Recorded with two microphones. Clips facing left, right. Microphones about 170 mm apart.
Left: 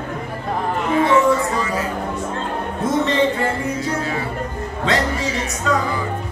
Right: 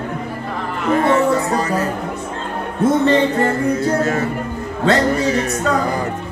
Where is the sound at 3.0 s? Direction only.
45° right (ahead or behind).